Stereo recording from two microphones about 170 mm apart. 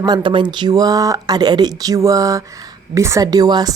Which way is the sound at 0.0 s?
25° right (ahead or behind).